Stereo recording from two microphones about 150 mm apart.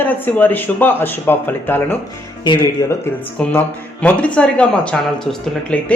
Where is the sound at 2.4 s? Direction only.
30° left (ahead or behind).